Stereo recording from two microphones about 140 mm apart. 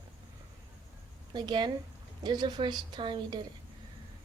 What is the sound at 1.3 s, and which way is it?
Speech, 30° right (ahead or behind).